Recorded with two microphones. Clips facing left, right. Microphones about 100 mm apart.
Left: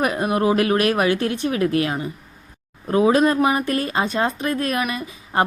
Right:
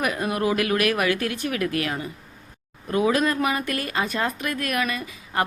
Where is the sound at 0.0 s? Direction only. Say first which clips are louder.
Left 4 dB; 25° left (ahead or behind).